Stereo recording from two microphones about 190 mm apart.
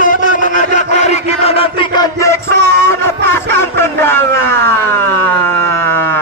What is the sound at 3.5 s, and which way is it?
Speech, 15° left (ahead or behind).